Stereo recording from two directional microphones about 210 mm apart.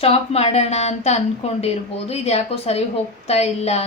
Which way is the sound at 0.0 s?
30° left (ahead or behind).